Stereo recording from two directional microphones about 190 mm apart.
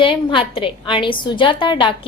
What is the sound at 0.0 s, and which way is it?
A woman's voice, 25° left (ahead or behind).